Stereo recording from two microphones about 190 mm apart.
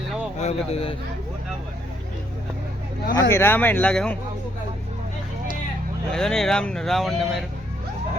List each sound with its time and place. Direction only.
0.4 s speech: 30° left (ahead or behind)
3.2 s speech: 15° left (ahead or behind)
6.1 s speech: 5° left (ahead or behind)